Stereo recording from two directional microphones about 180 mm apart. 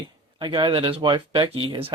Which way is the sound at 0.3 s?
25° right (ahead or behind).